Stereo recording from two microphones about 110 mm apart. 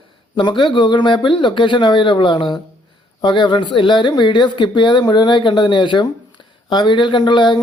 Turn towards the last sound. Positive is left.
turn(degrees=45)  # may be behind; listen again after turning